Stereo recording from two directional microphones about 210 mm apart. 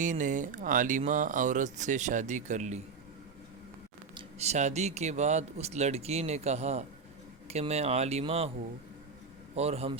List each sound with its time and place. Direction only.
0.0 s speech: 35° right (ahead or behind)
4.1 s speech: 30° right (ahead or behind)
9.6 s speech: 30° right (ahead or behind)